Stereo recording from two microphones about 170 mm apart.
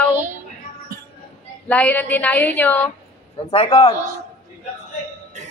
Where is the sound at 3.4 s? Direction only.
35° left (ahead or behind).